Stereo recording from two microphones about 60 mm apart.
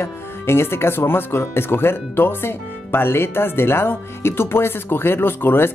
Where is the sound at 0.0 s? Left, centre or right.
Left.